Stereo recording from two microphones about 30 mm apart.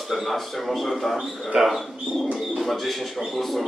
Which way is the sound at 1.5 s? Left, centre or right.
Centre.